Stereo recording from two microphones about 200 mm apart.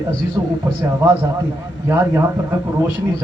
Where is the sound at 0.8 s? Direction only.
15° right (ahead or behind).